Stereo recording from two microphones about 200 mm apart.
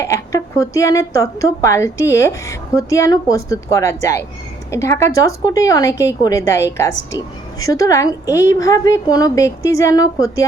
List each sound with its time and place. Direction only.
0.0 s a woman's voice: 15° left (ahead or behind)